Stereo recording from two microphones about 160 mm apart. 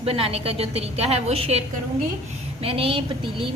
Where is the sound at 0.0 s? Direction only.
35° right (ahead or behind).